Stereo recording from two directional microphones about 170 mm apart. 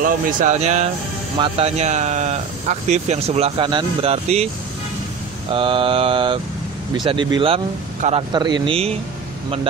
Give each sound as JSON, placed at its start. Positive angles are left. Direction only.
{"t": 0.0, "sound": "speech", "side_deg": -50}
{"t": 5.5, "sound": "speech", "side_deg": -30}